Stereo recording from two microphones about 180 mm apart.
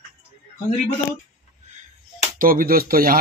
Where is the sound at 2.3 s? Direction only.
50° right (ahead or behind).